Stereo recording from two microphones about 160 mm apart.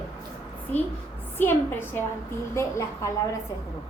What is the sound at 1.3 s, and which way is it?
A woman's voice, 15° left (ahead or behind).